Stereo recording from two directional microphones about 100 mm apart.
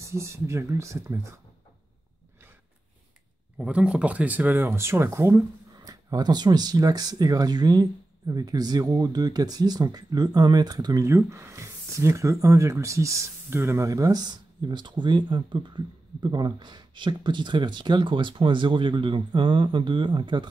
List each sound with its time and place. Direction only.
0.0 s speech: 30° right (ahead or behind)
3.5 s speech: 10° right (ahead or behind); by 5.4 s 25° right (ahead or behind)
5.9 s speech: 40° right (ahead or behind)
11.1 s speech: 30° right (ahead or behind); by 20.4 s 50° right (ahead or behind)